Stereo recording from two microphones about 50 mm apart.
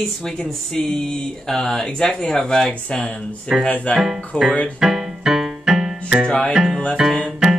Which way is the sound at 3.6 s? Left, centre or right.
Left.